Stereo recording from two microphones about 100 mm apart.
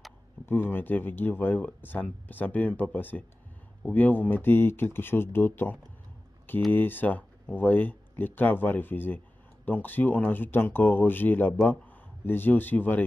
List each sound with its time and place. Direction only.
0.5 s speech: 20° left (ahead or behind)